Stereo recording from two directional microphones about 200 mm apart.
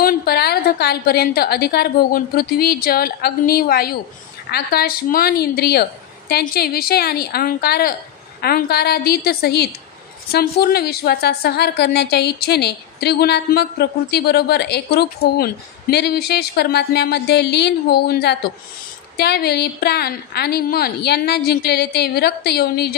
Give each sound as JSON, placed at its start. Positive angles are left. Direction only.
{"t": 0.0, "sound": "a woman's voice", "side_deg": 50}